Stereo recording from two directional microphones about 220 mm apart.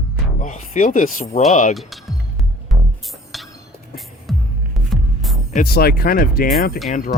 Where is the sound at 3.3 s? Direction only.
Centre (ahead or behind).